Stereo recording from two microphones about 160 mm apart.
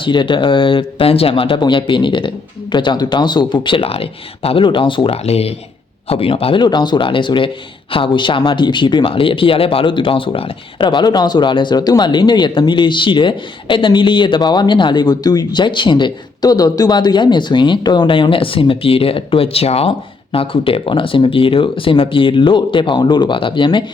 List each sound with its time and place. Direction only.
0.0 s speech: 30° left (ahead or behind)